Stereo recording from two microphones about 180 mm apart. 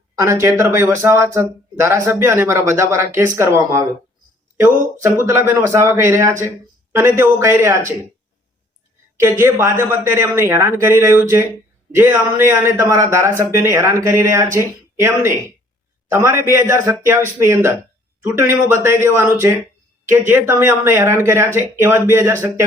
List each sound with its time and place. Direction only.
0.2 s speech: 15° right (ahead or behind)
5.2 s speech: 15° right (ahead or behind)
9.2 s speech: 15° right (ahead or behind)